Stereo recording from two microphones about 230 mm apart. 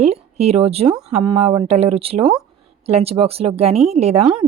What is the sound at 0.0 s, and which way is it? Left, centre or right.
Speech, right.